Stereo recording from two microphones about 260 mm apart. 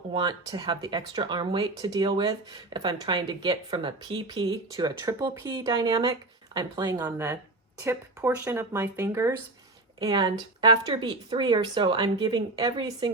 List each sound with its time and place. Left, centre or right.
0.1 s speech: centre